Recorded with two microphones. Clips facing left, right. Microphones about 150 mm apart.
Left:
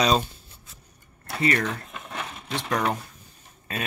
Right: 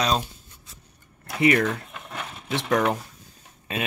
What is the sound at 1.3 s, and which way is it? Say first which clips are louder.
Speech: right 4 dB; 10° right (ahead or behind).